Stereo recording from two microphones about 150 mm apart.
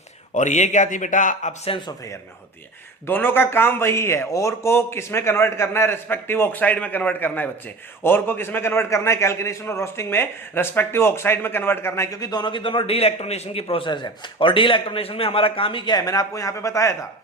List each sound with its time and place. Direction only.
0.3 s speech: 50° left (ahead or behind)
3.1 s a man's voice: 15° left (ahead or behind)